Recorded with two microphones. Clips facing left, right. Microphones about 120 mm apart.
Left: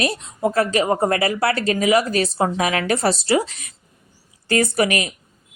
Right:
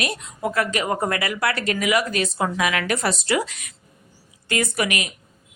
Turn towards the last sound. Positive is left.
turn(degrees=35)  # may be behind; listen again after turning